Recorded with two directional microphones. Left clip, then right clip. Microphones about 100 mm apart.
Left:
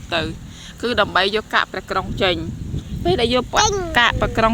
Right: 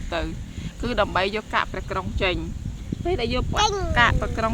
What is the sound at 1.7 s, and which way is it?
Speech, 40° left (ahead or behind).